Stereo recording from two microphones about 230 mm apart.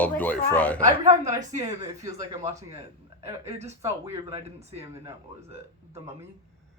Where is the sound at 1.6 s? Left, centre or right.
Centre.